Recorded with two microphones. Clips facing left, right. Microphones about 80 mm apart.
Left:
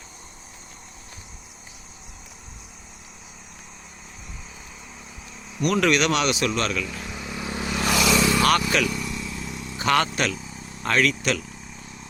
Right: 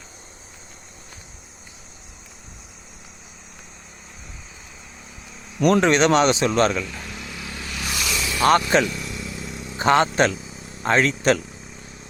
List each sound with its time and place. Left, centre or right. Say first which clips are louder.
5.8 s speech: right 2 dB; right
7.0 s vehicle: left 2 dB; centre
7.4 s vehicle: left 9 dB; left
7.9 s vehicle: left 8 dB; left
8.4 s speech: right 4 dB; right
8.9 s vehicle: left 1 dB; centre
9.7 s speech: right 5 dB; right